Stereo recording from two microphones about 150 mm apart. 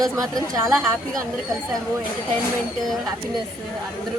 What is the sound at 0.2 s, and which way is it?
Speech, 25° right (ahead or behind).